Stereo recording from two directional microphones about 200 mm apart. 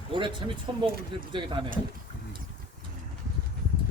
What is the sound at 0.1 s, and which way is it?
A man's voice, 25° right (ahead or behind).